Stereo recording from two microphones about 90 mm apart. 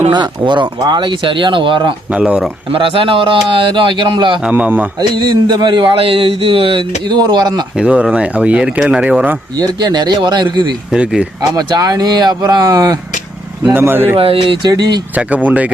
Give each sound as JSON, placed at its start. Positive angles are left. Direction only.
{"t": 0.1, "sound": "speech", "side_deg": -60}
{"t": 2.1, "sound": "speech", "side_deg": -10}
{"t": 2.7, "sound": "speech", "side_deg": -75}
{"t": 4.4, "sound": "speech", "side_deg": -15}
{"t": 4.9, "sound": "speech", "side_deg": -55}
{"t": 7.2, "sound": "speech", "side_deg": -50}
{"t": 7.8, "sound": "speech", "side_deg": -10}
{"t": 9.6, "sound": "speech", "side_deg": -50}
{"t": 10.9, "sound": "speech", "side_deg": -10}
{"t": 11.5, "sound": "speech", "side_deg": -45}
{"t": 13.7, "sound": "speech", "side_deg": -25}
{"t": 14.2, "sound": "speech", "side_deg": -75}
{"t": 14.7, "sound": "speech", "side_deg": -50}
{"t": 15.1, "sound": "speech", "side_deg": -15}